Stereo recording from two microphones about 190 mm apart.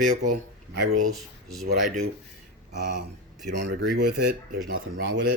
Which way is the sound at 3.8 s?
60° right (ahead or behind).